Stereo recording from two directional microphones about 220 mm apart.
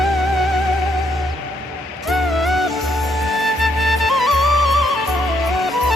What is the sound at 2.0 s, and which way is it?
Music, centre (ahead or behind).